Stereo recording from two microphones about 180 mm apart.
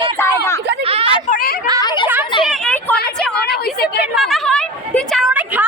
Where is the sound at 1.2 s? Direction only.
55° left (ahead or behind).